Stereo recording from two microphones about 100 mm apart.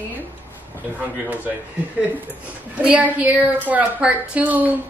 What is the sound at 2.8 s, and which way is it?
A woman's voice, 15° right (ahead or behind).